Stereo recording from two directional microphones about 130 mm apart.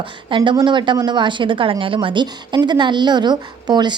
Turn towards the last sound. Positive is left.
turn(degrees=-35)  # may be behind; listen again after turning